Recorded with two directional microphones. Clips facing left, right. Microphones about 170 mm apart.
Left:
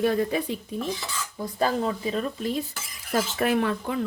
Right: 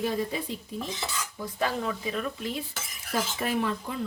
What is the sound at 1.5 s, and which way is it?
Speech, 35° left (ahead or behind).